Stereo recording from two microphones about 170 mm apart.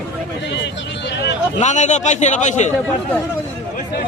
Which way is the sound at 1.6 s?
45° left (ahead or behind).